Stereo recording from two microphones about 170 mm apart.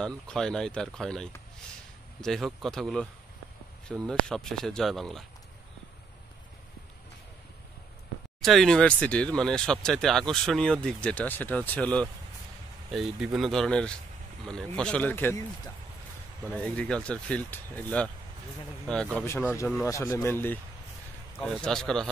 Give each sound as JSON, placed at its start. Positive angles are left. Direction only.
{"t": 0.0, "sound": "speech", "side_deg": 5}
{"t": 8.4, "sound": "speech", "side_deg": 0}
{"t": 16.5, "sound": "speech", "side_deg": 10}
{"t": 19.1, "sound": "speech", "side_deg": 15}